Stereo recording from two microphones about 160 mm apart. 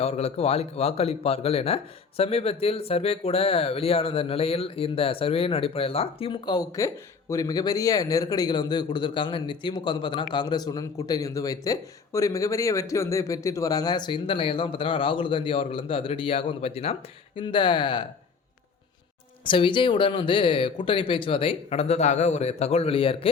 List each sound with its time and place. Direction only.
0.0 s speech: 40° left (ahead or behind)
19.5 s speech: 30° left (ahead or behind)